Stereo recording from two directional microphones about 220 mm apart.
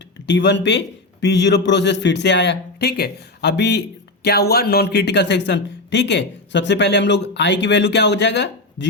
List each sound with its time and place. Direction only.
0.3 s a man's voice: 50° left (ahead or behind)